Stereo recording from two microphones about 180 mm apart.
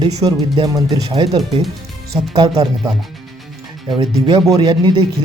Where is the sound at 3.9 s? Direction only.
25° right (ahead or behind).